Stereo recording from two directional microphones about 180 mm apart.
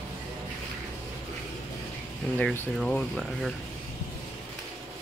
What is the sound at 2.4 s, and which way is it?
Speech, 5° left (ahead or behind).